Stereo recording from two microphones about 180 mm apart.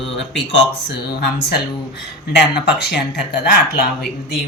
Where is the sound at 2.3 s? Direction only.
65° left (ahead or behind).